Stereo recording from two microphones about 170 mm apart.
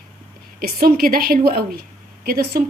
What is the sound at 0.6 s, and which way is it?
A woman's voice, 60° right (ahead or behind).